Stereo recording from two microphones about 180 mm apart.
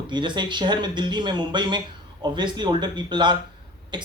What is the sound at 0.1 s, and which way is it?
A man's voice, 25° right (ahead or behind).